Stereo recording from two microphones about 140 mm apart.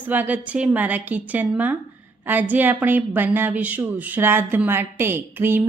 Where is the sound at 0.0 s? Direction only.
10° right (ahead or behind).